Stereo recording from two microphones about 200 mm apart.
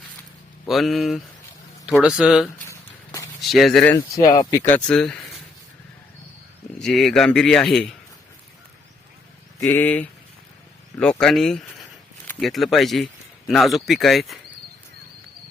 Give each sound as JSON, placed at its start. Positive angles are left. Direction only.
{"t": 0.7, "sound": "speech", "side_deg": 0}
{"t": 2.6, "sound": "a sound", "side_deg": 15}
{"t": 3.5, "sound": "speech", "side_deg": 0}
{"t": 3.9, "sound": "speech", "side_deg": 20}
{"t": 6.7, "sound": "speech", "side_deg": 0}
{"t": 9.6, "sound": "speech", "side_deg": 10}